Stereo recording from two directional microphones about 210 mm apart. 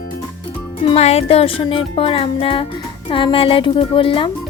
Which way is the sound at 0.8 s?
30° left (ahead or behind).